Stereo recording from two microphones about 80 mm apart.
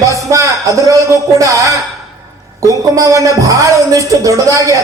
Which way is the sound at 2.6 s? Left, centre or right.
Right.